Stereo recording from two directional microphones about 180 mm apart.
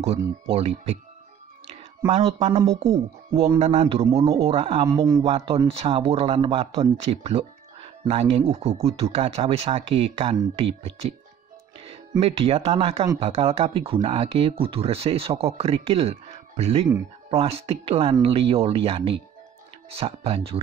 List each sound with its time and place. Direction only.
0.5 s speech: 35° right (ahead or behind)
2.0 s speech: 25° right (ahead or behind)
5.2 s speech: 35° right (ahead or behind)
12.2 s speech: 35° right (ahead or behind)